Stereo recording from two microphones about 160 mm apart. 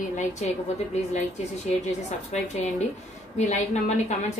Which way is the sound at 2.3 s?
45° left (ahead or behind).